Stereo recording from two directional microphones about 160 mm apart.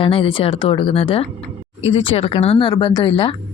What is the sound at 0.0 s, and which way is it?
Speech, 35° left (ahead or behind).